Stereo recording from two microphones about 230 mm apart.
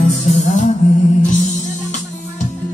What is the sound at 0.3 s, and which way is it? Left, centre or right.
Music, left.